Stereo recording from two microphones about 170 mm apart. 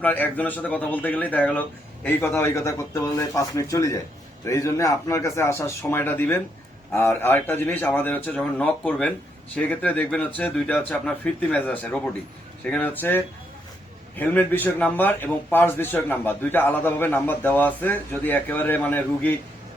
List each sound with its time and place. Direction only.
0.0 s a man's voice: 10° left (ahead or behind)